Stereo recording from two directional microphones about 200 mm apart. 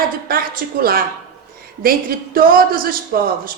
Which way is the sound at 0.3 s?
45° right (ahead or behind).